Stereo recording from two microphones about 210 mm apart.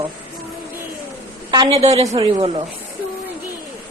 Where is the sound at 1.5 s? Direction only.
20° right (ahead or behind).